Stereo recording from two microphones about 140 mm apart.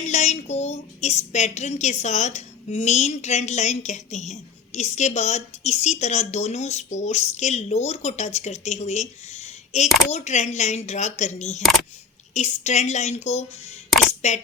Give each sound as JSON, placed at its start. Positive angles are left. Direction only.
{"t": 0.0, "sound": "speech", "side_deg": 55}